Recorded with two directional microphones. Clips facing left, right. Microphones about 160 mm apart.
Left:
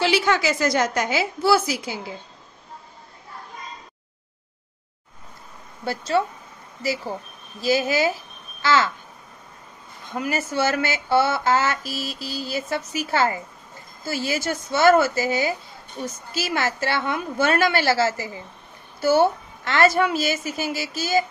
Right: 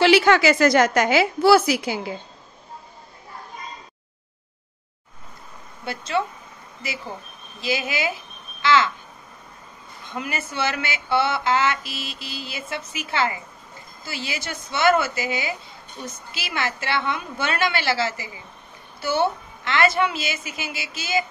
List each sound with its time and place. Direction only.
0.0 s a woman's voice: 75° right (ahead or behind)
5.9 s a woman's voice: 40° left (ahead or behind)
7.6 s a woman's voice: 40° left (ahead or behind)
10.1 s speech: 40° left (ahead or behind)